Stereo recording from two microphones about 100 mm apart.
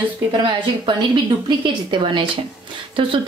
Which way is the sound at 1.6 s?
55° right (ahead or behind).